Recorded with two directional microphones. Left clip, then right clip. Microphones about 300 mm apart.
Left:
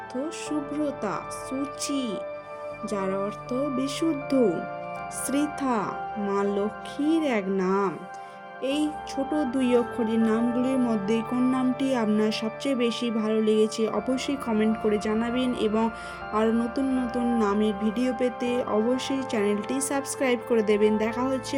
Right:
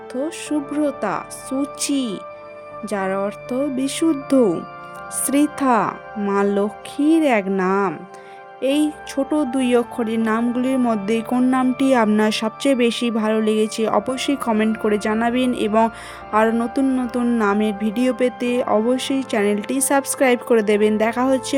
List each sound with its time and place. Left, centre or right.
0.1 s speech: right